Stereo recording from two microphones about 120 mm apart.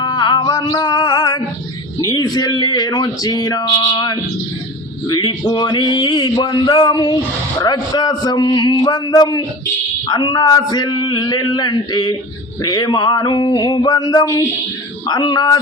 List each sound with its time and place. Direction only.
0.0 s music: 35° left (ahead or behind)
2.0 s speech: 35° left (ahead or behind)